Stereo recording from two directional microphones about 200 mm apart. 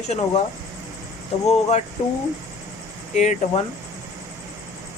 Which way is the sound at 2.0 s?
30° left (ahead or behind).